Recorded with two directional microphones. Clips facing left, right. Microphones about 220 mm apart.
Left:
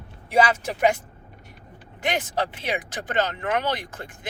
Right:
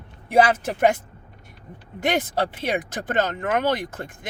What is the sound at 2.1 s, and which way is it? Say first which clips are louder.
Speech: right 2 dB; 55° right (ahead or behind).